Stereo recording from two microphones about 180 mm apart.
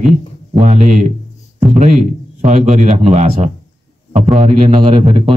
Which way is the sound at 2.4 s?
40° right (ahead or behind).